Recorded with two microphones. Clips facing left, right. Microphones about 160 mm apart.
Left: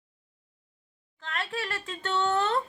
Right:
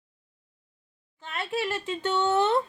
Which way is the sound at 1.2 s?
20° right (ahead or behind).